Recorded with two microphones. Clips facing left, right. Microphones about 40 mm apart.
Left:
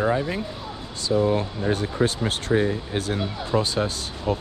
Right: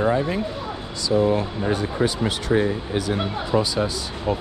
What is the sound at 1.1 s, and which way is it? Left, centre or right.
Speech, right.